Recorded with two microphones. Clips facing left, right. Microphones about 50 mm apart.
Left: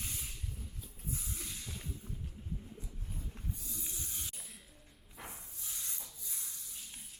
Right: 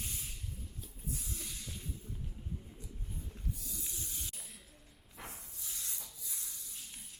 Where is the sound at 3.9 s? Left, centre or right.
Centre.